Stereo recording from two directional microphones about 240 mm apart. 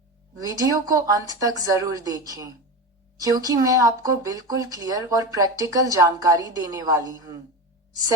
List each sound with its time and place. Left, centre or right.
0.3 s speech: centre